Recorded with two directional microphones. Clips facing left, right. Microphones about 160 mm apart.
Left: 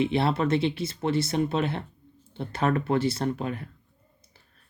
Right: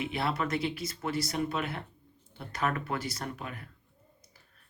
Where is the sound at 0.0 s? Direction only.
30° left (ahead or behind).